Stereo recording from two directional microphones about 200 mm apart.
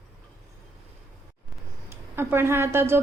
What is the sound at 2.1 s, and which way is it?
Speech, 10° right (ahead or behind).